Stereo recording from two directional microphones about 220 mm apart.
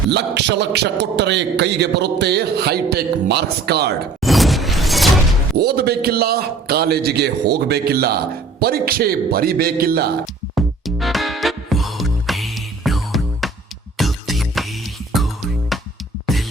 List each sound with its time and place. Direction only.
0.1 s a man's voice: 50° right (ahead or behind)
4.2 s a sound: centre (ahead or behind)
5.5 s a man's voice: 45° right (ahead or behind)
10.5 s music: centre (ahead or behind)
15.7 s music: centre (ahead or behind)